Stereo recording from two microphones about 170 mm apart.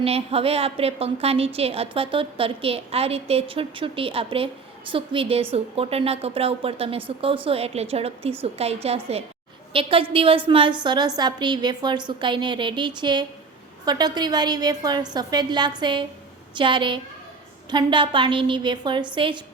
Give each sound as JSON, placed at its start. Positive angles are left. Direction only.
{"t": 0.0, "sound": "a woman's voice", "side_deg": -35}